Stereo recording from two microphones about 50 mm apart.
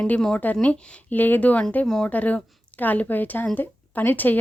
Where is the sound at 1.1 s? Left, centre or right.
Left.